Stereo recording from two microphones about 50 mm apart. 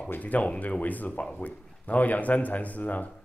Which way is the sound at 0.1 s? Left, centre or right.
Left.